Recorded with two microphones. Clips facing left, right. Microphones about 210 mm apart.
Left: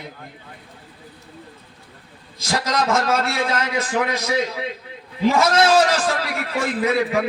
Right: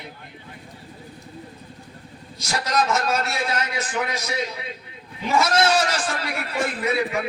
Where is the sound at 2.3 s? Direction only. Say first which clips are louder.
Left 1 dB; 90° left.